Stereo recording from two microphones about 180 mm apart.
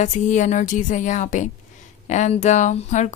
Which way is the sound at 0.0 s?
45° left (ahead or behind).